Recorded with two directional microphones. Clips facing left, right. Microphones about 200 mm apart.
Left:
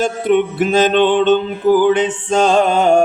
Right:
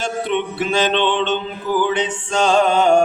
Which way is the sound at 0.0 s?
45° left (ahead or behind).